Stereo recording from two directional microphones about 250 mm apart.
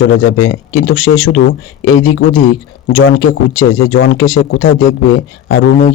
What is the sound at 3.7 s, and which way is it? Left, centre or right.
A man's voice, left.